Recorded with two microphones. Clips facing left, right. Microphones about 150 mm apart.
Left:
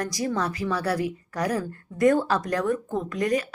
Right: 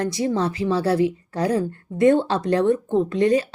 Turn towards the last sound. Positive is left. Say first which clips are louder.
# right 7 dB
turn(degrees=-30)  # may be behind; listen again after turning